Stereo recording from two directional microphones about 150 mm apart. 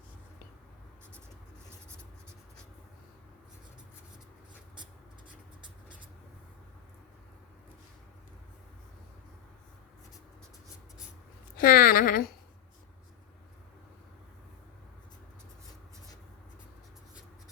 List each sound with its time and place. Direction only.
11.5 s speech: 70° left (ahead or behind)